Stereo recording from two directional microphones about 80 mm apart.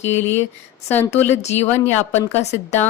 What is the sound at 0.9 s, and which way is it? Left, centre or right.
Speech, left.